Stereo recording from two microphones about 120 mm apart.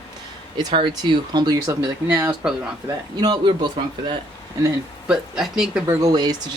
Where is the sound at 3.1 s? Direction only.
40° right (ahead or behind).